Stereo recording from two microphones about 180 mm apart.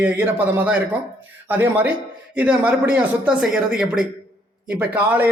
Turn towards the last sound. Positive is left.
turn(degrees=-10)  # may be behind; listen again after turning